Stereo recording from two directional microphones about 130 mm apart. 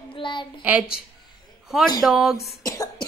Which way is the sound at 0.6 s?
10° right (ahead or behind).